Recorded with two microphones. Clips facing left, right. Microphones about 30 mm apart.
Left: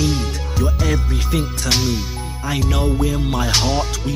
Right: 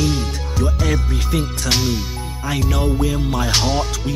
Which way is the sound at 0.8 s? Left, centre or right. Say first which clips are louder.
Even; centre.